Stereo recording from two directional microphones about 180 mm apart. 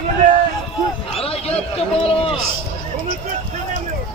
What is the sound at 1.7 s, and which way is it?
Speech, 35° left (ahead or behind).